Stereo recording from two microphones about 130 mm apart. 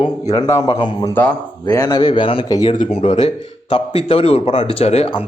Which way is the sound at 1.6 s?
30° left (ahead or behind).